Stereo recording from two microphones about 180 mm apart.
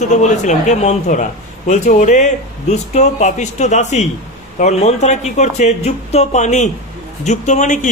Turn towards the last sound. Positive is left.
turn(degrees=45)  # may be behind; listen again after turning